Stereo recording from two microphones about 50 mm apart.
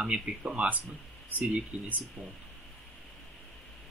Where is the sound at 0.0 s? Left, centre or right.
Centre.